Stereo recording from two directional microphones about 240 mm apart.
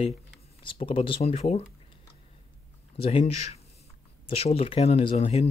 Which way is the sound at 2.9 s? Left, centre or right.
Left.